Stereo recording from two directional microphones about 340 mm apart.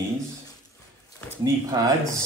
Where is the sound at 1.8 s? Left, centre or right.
Centre.